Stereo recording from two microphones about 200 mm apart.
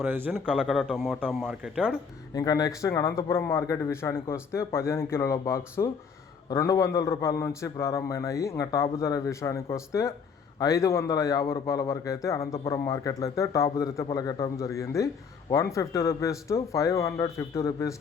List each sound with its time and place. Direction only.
0.0 s speech: 10° right (ahead or behind)
2.3 s a man's voice: 15° left (ahead or behind)